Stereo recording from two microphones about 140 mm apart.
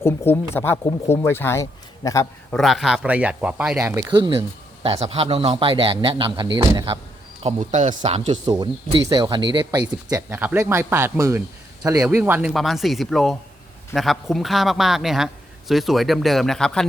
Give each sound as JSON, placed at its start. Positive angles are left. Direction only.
{"t": 0.0, "sound": "a man's voice", "side_deg": 20}
{"t": 2.5, "sound": "a man's voice", "side_deg": 0}
{"t": 3.8, "sound": "speech", "side_deg": -20}
{"t": 4.1, "sound": "speech", "side_deg": -35}
{"t": 7.4, "sound": "speech", "side_deg": -55}
{"t": 8.6, "sound": "speech", "side_deg": -30}
{"t": 10.1, "sound": "speech", "side_deg": -20}
{"t": 12.0, "sound": "speech", "side_deg": -15}
{"t": 12.5, "sound": "a man's voice", "side_deg": 0}